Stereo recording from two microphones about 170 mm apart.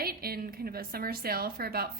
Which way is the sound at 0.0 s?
60° right (ahead or behind).